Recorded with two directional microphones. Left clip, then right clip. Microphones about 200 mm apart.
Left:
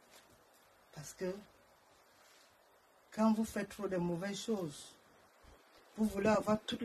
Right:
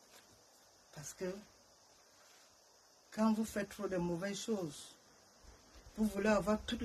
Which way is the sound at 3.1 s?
25° right (ahead or behind).